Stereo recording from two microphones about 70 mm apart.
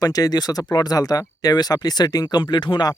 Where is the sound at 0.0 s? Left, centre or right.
Left.